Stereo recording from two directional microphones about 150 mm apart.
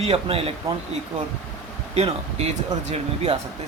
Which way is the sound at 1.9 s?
45° right (ahead or behind).